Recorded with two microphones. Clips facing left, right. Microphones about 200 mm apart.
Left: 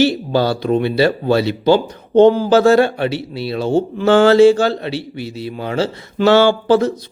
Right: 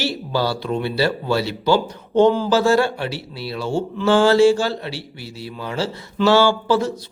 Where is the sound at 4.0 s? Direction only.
60° left (ahead or behind).